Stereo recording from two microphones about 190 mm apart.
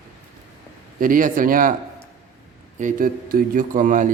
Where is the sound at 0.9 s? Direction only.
45° right (ahead or behind).